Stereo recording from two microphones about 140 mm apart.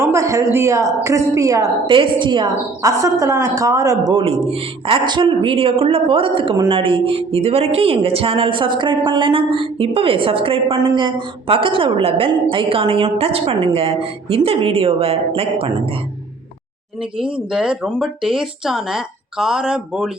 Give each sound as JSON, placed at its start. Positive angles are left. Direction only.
{"t": 0.0, "sound": "a woman's voice", "side_deg": -20}
{"t": 1.9, "sound": "a woman's voice", "side_deg": -35}
{"t": 4.1, "sound": "speech", "side_deg": -40}
{"t": 17.3, "sound": "speech", "side_deg": -5}